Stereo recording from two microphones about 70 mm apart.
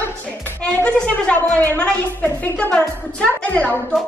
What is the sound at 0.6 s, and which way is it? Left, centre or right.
A woman's voice, centre.